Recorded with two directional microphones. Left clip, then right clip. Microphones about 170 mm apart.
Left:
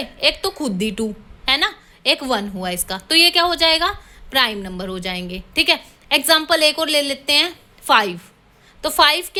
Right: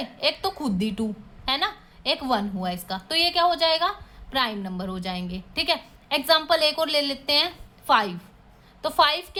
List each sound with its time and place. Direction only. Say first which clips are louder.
0.0 s a woman's voice: left 6 dB; 20° left (ahead or behind)